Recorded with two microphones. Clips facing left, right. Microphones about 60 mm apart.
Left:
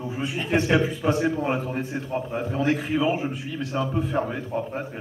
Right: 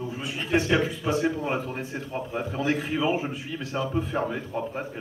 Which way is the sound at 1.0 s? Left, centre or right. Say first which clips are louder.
Left 3 dB; left.